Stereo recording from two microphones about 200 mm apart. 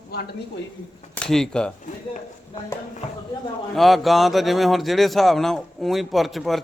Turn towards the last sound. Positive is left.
turn(degrees=0)  # may be behind; listen again after turning